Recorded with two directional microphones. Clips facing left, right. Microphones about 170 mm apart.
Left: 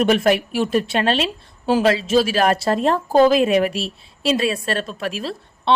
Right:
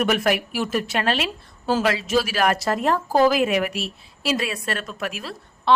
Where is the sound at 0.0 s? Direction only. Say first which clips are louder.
Left 4 dB; 30° left (ahead or behind).